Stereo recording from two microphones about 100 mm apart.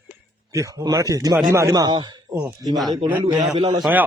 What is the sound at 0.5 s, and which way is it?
A man's voice, 35° right (ahead or behind).